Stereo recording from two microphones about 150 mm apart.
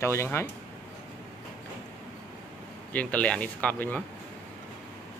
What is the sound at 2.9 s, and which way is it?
Speech, 10° left (ahead or behind).